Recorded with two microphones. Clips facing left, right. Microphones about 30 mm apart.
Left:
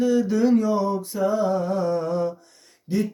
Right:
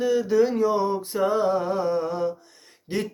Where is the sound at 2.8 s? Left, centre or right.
Right.